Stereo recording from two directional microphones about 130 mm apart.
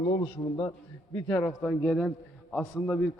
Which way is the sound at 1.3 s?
15° left (ahead or behind).